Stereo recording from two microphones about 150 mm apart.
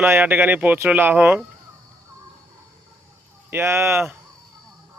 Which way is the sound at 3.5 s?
15° right (ahead or behind).